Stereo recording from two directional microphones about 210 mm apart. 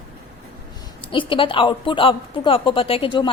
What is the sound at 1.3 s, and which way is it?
A woman's voice, 25° left (ahead or behind).